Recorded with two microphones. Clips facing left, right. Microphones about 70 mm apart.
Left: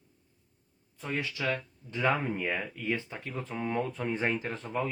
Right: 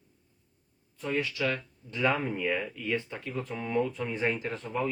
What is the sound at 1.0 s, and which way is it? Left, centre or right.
Speech, left.